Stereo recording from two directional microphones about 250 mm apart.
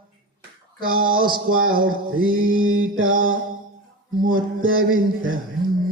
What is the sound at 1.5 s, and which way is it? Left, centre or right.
Music, right.